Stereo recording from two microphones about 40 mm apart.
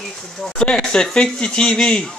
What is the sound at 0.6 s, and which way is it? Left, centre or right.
Speech, centre.